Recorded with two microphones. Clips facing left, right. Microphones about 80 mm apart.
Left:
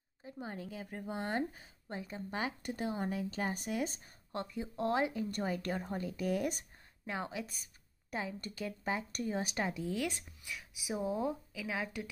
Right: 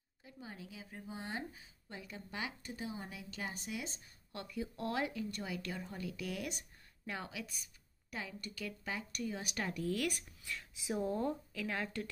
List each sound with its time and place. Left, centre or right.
0.2 s a woman's voice: left
2.0 s speech: left
2.6 s a woman's voice: left
3.5 s a woman's voice: left
4.3 s speech: left
5.3 s a woman's voice: left
9.7 s speech: centre